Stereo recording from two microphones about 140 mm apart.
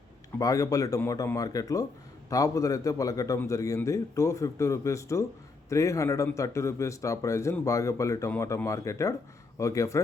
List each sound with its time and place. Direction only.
0.3 s speech: 25° left (ahead or behind)